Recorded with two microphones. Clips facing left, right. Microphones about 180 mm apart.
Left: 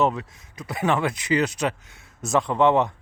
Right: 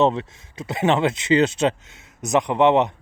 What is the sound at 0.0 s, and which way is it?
A man's voice, 25° right (ahead or behind).